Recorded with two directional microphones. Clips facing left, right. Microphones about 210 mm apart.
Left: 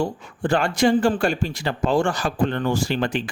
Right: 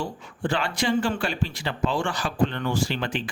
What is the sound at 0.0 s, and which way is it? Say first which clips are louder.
Speech: left 5 dB; 45° left (ahead or behind).